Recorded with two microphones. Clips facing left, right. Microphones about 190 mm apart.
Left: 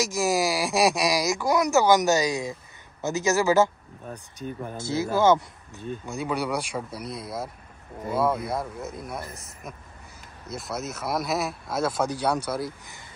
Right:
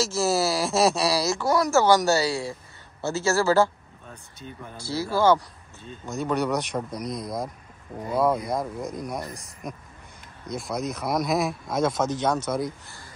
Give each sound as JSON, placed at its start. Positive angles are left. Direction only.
{"t": 0.0, "sound": "speech", "side_deg": 15}
{"t": 4.7, "sound": "speech", "side_deg": 20}
{"t": 6.0, "sound": "speech", "side_deg": 10}